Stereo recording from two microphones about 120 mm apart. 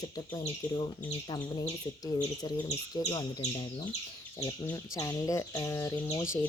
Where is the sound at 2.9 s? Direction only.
35° left (ahead or behind).